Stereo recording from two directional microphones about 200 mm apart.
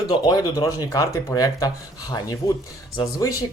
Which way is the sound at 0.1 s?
20° left (ahead or behind).